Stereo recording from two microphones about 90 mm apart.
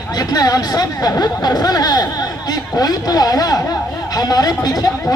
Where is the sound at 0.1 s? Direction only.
45° left (ahead or behind).